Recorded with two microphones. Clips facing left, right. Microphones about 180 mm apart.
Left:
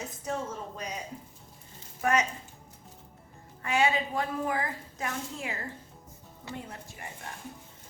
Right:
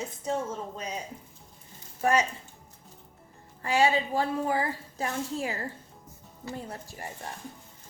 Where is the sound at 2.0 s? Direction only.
30° right (ahead or behind).